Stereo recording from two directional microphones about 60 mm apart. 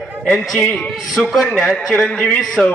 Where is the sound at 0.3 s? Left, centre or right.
Centre.